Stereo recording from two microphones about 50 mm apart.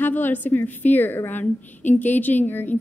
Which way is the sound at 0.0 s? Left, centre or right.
Left.